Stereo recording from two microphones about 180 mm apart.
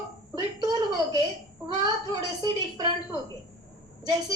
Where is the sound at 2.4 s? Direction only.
25° right (ahead or behind).